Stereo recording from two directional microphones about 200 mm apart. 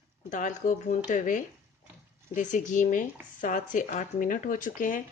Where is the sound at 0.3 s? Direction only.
40° left (ahead or behind).